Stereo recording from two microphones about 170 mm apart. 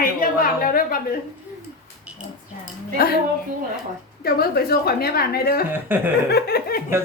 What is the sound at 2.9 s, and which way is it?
Speech, 65° left (ahead or behind).